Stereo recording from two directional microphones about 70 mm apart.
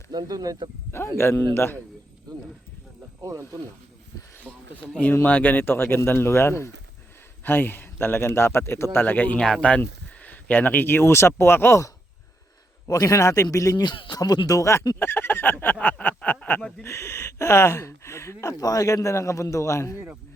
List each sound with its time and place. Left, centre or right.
0.1 s speech: right
0.9 s speech: left
3.2 s speech: right
4.4 s speech: centre
9.4 s speech: centre; by 11.9 s left
12.9 s speech: left
13.7 s speech: left
14.6 s speech: left
14.9 s a sound: left
16.8 s speech: left
18.6 s speech: left